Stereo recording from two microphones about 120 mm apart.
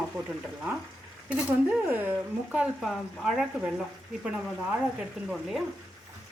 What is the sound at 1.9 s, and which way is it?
Speech, 15° right (ahead or behind).